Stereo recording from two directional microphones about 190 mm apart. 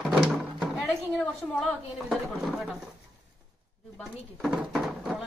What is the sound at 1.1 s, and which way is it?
Speech, centre (ahead or behind).